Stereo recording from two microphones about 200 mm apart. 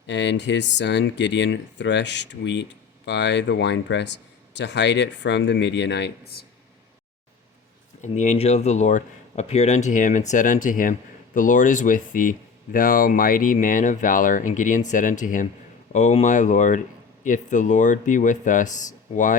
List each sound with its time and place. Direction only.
0.1 s speech: 60° left (ahead or behind)
8.0 s speech: 35° left (ahead or behind)